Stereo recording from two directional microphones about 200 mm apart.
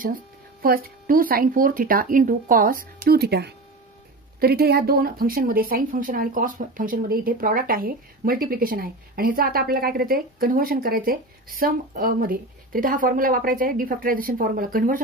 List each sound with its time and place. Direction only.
0.6 s speech: 45° right (ahead or behind)